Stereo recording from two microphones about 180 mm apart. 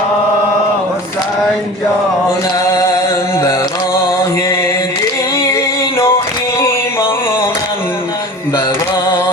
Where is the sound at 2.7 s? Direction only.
15° left (ahead or behind).